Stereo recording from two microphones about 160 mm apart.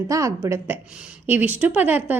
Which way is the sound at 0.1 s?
20° right (ahead or behind).